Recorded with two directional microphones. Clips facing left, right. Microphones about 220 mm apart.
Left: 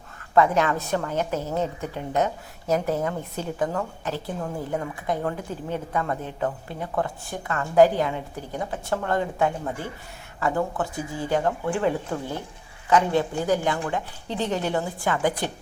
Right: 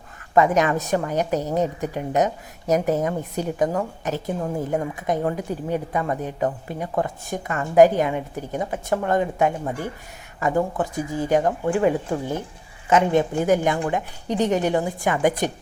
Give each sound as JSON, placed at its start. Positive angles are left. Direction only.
{"t": 0.3, "sound": "a woman's voice", "side_deg": -15}